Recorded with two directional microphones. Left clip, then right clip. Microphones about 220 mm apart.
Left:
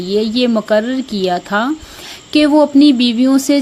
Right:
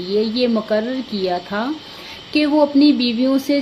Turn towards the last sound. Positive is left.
turn(degrees=45)  # may be behind; listen again after turning